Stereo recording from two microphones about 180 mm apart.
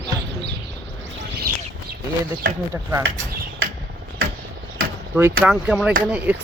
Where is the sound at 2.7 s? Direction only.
15° right (ahead or behind).